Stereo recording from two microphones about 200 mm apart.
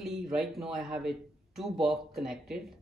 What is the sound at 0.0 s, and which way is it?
A man's voice, centre (ahead or behind).